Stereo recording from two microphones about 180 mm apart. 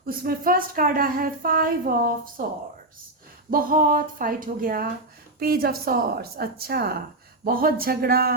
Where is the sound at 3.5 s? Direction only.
50° right (ahead or behind).